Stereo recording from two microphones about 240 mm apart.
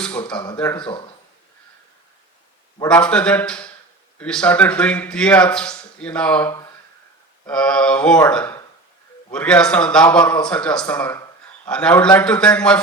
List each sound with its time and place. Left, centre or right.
0.3 s speech: centre
0.8 s speech: centre
2.8 s speech: centre